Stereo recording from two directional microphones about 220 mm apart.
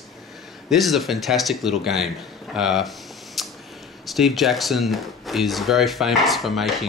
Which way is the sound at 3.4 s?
Centre (ahead or behind).